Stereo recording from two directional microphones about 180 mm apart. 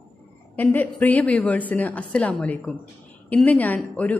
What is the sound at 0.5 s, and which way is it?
A woman's voice, 10° left (ahead or behind).